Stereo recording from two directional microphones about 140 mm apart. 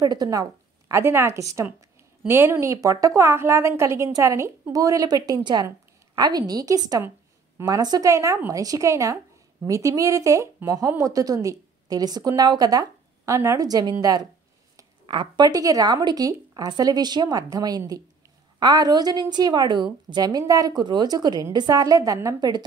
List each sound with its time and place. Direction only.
0.0 s a woman's voice: 25° right (ahead or behind)